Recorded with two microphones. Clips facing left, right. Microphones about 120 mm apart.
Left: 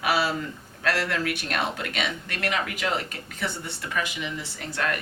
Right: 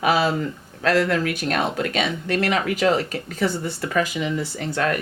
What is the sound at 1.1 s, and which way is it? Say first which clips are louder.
Speech: right 6 dB; 40° right (ahead or behind).